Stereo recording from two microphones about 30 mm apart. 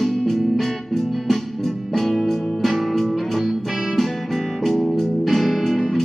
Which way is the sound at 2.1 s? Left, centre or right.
Centre.